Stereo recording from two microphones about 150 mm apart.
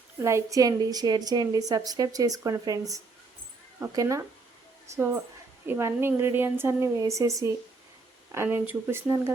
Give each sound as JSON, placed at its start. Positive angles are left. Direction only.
{"t": 0.2, "sound": "a woman's voice", "side_deg": -20}